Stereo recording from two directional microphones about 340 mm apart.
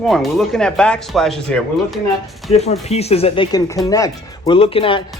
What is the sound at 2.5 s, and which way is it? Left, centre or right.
Speech, centre.